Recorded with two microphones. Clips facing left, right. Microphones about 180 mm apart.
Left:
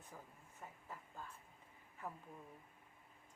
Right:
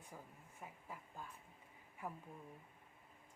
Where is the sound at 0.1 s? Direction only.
10° right (ahead or behind).